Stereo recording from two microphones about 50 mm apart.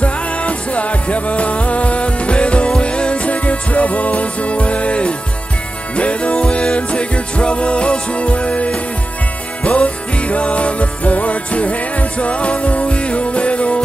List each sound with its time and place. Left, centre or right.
0.0 s music: left